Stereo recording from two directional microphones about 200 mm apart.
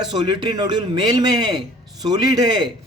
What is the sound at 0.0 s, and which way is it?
A man's voice, 20° right (ahead or behind).